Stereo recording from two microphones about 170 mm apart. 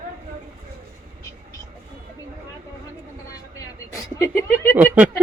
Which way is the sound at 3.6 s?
20° left (ahead or behind).